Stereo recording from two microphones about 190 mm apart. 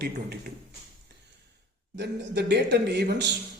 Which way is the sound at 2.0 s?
65° right (ahead or behind).